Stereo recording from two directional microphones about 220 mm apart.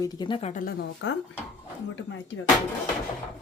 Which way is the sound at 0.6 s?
50° left (ahead or behind).